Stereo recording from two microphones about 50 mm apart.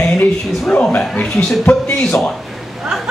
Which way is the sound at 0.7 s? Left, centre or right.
Centre.